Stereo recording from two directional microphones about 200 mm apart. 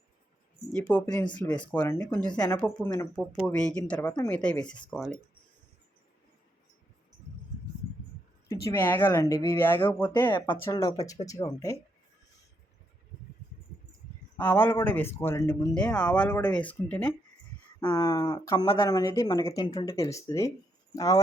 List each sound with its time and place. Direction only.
0.9 s speech: 10° left (ahead or behind)
1.8 s speech: 20° left (ahead or behind); by 5.1 s centre (ahead or behind)
8.7 s speech: 10° left (ahead or behind)
14.3 s speech: 10° left (ahead or behind)
17.7 s speech: 20° left (ahead or behind)